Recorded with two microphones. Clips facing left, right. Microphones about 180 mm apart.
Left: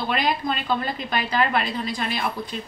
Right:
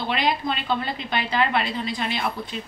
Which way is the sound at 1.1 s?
45° left (ahead or behind).